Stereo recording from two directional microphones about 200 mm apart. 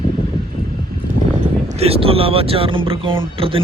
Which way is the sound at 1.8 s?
30° right (ahead or behind).